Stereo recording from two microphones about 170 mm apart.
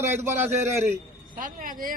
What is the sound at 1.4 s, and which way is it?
Speech, 50° right (ahead or behind).